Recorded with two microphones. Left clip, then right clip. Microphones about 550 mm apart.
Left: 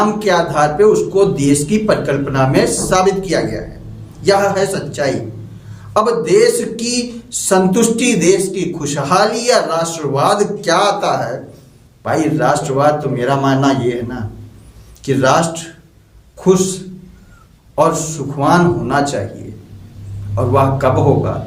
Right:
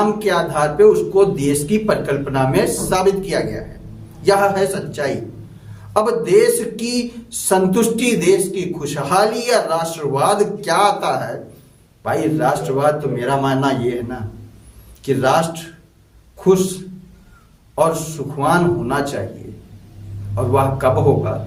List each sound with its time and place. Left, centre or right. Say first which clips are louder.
0.2 s speech: left 4 dB; right
17.7 s speech: left 3 dB; right
20.3 s speech: left 3 dB; right